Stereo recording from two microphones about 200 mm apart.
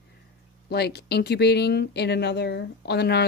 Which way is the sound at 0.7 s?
55° left (ahead or behind).